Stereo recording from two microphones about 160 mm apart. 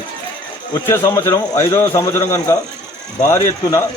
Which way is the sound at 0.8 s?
15° left (ahead or behind).